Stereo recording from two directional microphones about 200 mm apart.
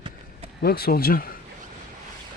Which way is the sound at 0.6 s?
50° left (ahead or behind).